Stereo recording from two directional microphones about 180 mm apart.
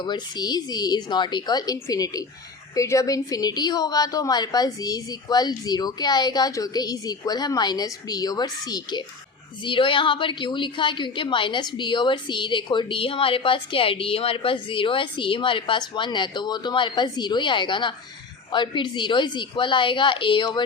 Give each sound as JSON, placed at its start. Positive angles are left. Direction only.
{"t": 0.0, "sound": "a woman's voice", "side_deg": 25}